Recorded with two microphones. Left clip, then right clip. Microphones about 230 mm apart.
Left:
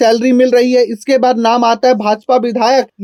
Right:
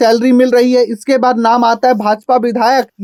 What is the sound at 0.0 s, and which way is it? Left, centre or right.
Speech, right.